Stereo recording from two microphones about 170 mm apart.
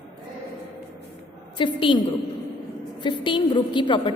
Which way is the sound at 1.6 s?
30° left (ahead or behind).